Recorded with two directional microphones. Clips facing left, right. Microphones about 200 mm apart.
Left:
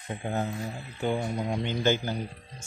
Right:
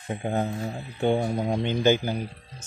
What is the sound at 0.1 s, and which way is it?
Speech, 20° right (ahead or behind).